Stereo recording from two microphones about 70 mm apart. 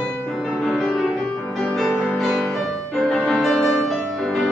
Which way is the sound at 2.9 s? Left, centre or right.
Centre.